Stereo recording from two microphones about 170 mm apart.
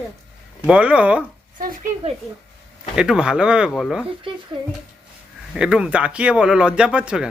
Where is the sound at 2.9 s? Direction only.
5° right (ahead or behind).